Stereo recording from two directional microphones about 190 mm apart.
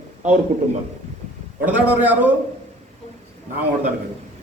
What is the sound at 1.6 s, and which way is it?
Speech, 10° right (ahead or behind).